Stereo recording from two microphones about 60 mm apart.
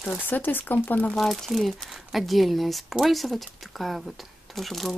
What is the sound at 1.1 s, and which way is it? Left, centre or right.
Speech, centre.